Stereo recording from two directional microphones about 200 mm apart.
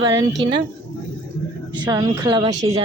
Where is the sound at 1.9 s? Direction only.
20° right (ahead or behind).